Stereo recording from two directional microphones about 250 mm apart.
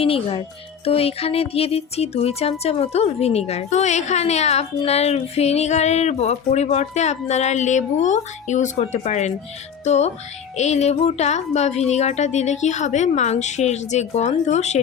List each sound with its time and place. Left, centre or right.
0.0 s speech: left
9.8 s music: left
10.6 s speech: left